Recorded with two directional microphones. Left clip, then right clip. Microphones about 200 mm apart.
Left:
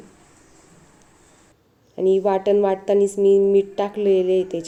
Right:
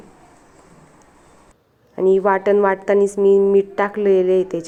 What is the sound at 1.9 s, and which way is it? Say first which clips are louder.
Speech: right 3 dB; 30° right (ahead or behind).